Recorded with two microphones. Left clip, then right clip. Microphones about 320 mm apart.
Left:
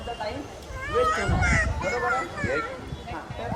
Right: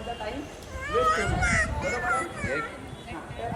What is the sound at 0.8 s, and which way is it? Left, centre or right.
Speech, centre.